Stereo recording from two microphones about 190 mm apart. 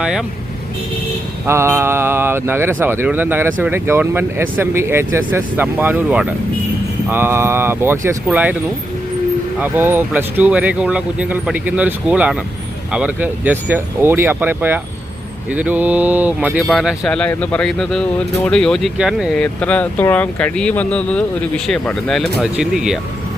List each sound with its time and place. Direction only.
0.0 s speech: centre (ahead or behind)
1.5 s speech: 15° right (ahead or behind)
9.6 s speech: 10° right (ahead or behind)
16.6 s speech: centre (ahead or behind)